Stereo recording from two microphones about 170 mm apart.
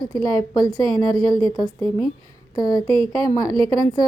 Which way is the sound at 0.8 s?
30° right (ahead or behind).